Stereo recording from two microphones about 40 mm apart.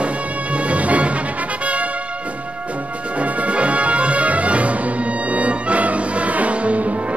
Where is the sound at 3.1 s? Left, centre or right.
Right.